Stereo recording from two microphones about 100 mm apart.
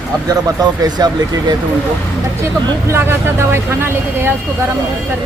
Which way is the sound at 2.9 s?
25° right (ahead or behind).